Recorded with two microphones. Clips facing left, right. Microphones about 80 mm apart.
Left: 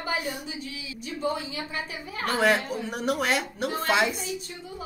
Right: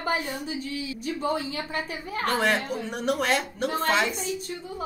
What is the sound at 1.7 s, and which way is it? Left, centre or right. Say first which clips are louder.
Speech: right 3 dB; right.